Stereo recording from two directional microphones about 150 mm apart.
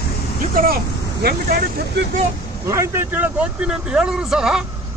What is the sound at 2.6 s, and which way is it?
Speech, 20° right (ahead or behind).